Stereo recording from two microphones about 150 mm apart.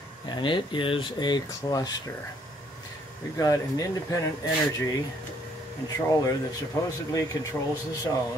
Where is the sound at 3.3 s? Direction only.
25° left (ahead or behind).